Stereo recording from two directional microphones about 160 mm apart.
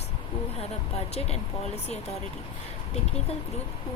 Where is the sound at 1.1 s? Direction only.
40° left (ahead or behind).